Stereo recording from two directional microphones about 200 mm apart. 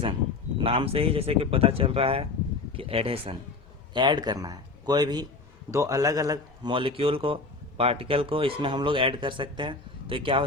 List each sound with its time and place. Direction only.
0.6 s speech: 25° right (ahead or behind)